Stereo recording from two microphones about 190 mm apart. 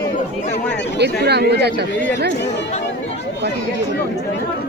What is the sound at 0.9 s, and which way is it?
Speech, 60° right (ahead or behind).